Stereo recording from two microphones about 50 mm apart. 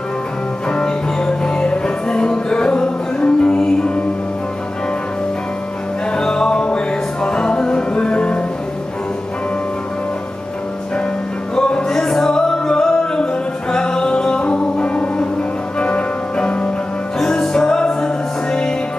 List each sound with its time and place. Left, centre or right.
0.7 s music: centre
3.5 s music: centre
6.1 s music: centre
11.5 s music: centre